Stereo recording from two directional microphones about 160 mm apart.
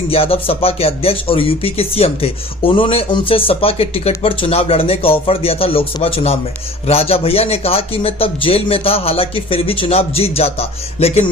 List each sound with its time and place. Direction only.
0.1 s a man's voice: 35° left (ahead or behind)